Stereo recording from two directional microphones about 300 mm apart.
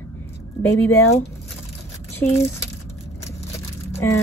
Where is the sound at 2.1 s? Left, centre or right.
Centre.